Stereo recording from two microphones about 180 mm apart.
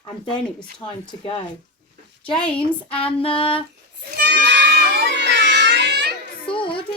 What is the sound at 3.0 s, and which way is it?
Speech, 30° left (ahead or behind).